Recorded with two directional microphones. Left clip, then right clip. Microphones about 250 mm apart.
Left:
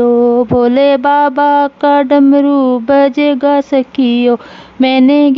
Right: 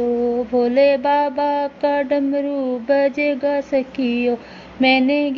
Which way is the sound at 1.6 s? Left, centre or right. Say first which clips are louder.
Left 9 dB; left.